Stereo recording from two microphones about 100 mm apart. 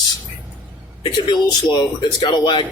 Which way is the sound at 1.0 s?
50° left (ahead or behind).